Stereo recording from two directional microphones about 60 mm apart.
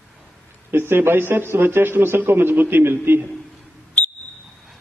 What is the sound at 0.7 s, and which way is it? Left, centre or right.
A man's voice, right.